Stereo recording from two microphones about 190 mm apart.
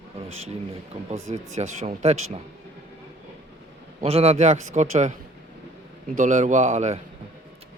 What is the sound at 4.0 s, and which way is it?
Speech, 35° right (ahead or behind).